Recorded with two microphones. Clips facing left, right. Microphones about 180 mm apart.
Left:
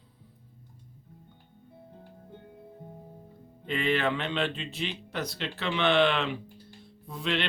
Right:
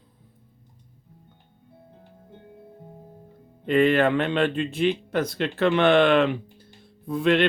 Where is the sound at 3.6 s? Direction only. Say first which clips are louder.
Right 9 dB; 50° right (ahead or behind).